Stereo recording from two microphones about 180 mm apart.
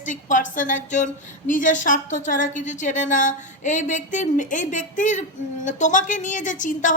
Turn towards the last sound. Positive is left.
turn(degrees=45)  # may be behind; listen again after turning